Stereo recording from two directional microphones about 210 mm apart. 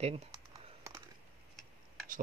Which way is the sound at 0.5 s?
15° right (ahead or behind).